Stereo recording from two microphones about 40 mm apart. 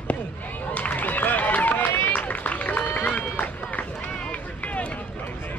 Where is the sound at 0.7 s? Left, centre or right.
Left.